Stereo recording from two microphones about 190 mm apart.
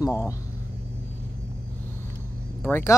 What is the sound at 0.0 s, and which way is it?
Speech, 15° left (ahead or behind).